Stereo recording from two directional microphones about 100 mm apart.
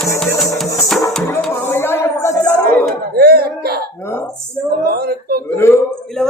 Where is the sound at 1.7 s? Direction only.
25° left (ahead or behind).